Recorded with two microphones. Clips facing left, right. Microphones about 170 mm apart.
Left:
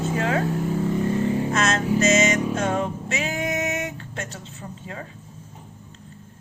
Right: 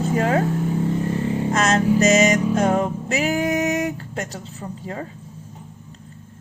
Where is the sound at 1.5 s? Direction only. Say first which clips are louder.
Right 4 dB; 35° right (ahead or behind).